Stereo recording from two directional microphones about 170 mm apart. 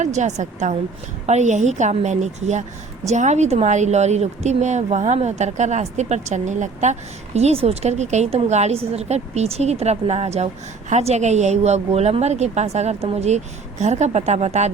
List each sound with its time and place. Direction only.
0.0 s a woman's voice: 45° right (ahead or behind)